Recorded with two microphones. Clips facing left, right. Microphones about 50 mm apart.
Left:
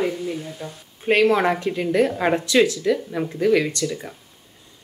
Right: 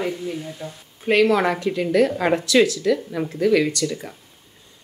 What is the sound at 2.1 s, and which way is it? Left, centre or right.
Speech, centre.